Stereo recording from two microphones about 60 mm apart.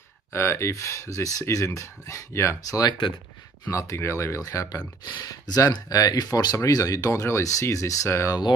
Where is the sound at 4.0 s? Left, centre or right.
Left.